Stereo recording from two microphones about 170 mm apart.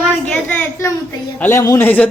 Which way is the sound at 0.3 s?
10° left (ahead or behind).